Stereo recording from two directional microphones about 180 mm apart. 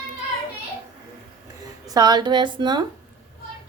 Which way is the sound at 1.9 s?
20° right (ahead or behind).